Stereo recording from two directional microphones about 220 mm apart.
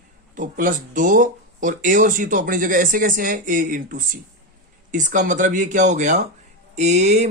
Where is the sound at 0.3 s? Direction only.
35° right (ahead or behind).